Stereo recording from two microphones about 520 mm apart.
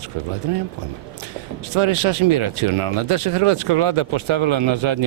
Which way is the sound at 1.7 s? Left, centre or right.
Right.